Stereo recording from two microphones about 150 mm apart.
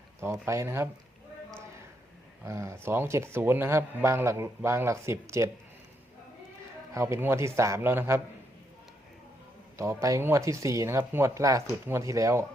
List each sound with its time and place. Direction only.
0.2 s speech: 20° right (ahead or behind)
2.4 s a man's voice: 20° right (ahead or behind)
6.9 s a man's voice: 20° right (ahead or behind)
9.7 s speech: 20° right (ahead or behind)